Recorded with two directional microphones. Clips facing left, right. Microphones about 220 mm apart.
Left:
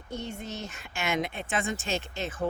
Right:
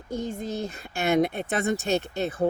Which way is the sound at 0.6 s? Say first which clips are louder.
Right 6 dB; 35° right (ahead or behind).